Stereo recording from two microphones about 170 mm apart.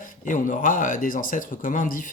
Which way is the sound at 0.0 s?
50° left (ahead or behind).